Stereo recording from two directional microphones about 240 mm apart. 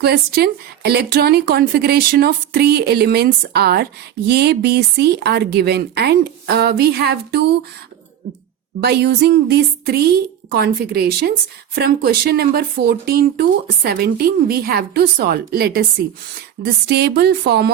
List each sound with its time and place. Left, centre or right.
0.0 s a woman's voice: right
8.8 s a woman's voice: right